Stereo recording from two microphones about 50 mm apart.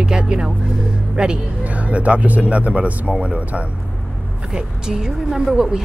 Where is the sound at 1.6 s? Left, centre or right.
Right.